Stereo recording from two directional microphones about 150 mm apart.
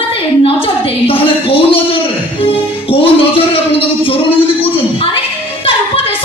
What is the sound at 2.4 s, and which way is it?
Music, 40° left (ahead or behind).